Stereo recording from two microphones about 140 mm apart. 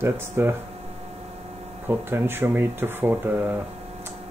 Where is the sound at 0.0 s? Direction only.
15° right (ahead or behind).